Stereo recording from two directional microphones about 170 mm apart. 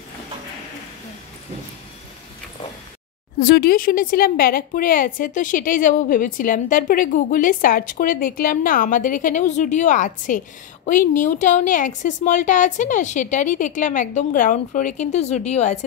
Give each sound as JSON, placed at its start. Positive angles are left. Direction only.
{"t": 3.3, "sound": "speech", "side_deg": 65}